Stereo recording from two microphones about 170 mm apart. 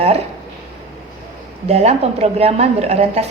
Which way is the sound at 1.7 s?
40° right (ahead or behind).